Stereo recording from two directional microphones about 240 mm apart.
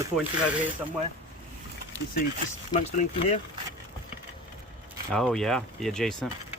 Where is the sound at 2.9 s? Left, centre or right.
Left.